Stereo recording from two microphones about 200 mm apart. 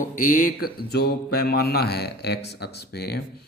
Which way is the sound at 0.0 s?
45° left (ahead or behind).